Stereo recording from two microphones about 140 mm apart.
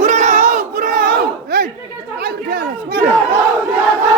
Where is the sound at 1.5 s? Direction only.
90° right.